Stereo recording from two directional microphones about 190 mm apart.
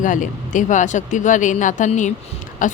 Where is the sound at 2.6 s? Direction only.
45° left (ahead or behind).